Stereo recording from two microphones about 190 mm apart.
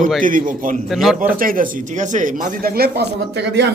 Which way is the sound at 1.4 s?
45° right (ahead or behind).